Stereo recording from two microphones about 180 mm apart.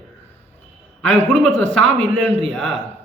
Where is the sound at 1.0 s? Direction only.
5° left (ahead or behind).